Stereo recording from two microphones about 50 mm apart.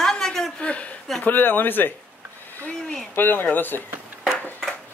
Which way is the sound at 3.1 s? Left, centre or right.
Left.